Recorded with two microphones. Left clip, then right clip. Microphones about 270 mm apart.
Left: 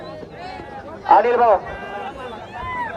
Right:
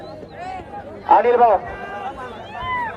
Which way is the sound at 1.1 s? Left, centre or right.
Left.